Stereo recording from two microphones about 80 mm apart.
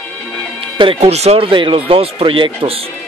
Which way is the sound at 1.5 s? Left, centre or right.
Right.